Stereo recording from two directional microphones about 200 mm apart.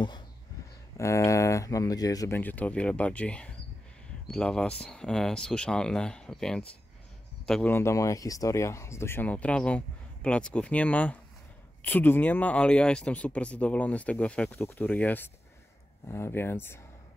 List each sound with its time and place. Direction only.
0.9 s speech: 15° left (ahead or behind)